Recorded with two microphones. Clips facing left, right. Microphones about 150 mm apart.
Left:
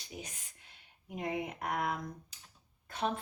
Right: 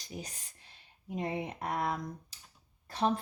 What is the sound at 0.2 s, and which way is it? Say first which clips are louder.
Speech: right 2 dB; 35° right (ahead or behind).